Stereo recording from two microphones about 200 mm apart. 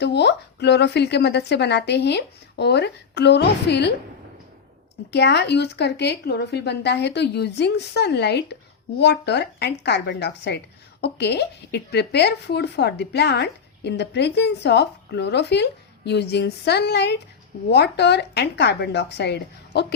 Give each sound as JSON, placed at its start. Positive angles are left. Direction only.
{"t": 0.0, "sound": "speech", "side_deg": 60}
{"t": 5.1, "sound": "speech", "side_deg": 60}